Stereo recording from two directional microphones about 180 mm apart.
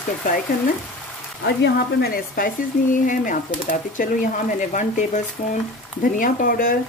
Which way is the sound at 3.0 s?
45° left (ahead or behind).